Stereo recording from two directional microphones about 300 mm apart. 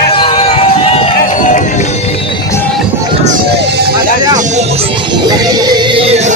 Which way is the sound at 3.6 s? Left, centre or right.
Right.